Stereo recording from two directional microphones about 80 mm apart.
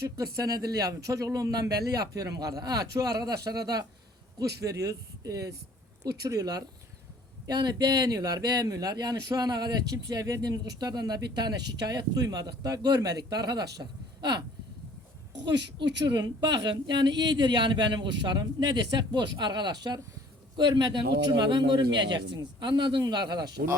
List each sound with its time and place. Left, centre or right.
0.2 s speech: right
16.1 s speech: right